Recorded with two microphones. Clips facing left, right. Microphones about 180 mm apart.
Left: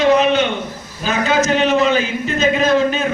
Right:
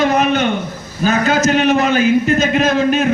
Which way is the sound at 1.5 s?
60° right (ahead or behind).